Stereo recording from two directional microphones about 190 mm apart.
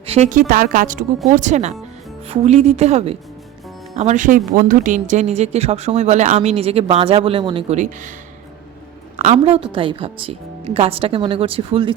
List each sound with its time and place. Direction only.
0.0 s a woman's voice: 35° right (ahead or behind)
9.1 s a woman's voice: 35° right (ahead or behind)